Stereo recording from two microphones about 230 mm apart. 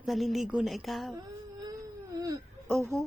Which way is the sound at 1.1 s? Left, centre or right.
Centre.